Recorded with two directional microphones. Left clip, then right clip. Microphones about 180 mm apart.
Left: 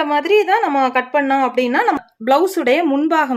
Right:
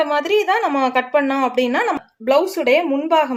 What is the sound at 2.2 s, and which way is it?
Speech, 30° left (ahead or behind).